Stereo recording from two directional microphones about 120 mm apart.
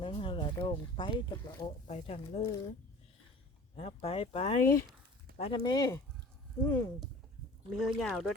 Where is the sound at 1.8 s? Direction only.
65° left (ahead or behind).